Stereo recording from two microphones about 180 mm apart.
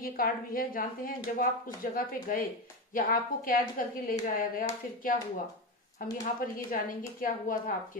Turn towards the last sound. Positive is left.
turn(degrees=50)  # may be behind; listen again after turning